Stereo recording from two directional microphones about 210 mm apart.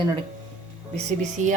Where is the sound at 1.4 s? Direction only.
35° right (ahead or behind).